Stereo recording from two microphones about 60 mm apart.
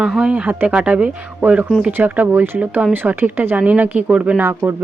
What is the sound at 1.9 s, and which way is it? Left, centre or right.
Speech, right.